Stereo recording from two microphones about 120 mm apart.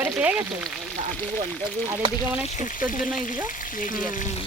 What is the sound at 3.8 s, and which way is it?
Speech, 90° left.